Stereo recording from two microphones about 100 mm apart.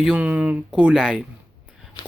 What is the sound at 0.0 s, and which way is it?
Speech, 10° right (ahead or behind).